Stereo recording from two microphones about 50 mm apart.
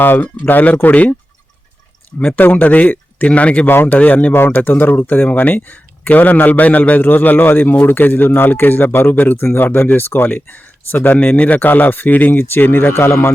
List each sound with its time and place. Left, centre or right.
0.0 s speech: left
2.1 s speech: left
3.7 s speech: left
3.9 s speech: left
12.4 s speech: left